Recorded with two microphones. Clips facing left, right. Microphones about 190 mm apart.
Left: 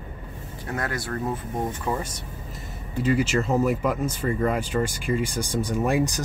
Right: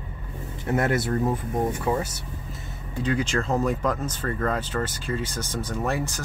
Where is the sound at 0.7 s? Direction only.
25° right (ahead or behind).